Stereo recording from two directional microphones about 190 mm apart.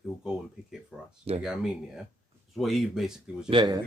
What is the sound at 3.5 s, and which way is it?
Speech, 20° right (ahead or behind).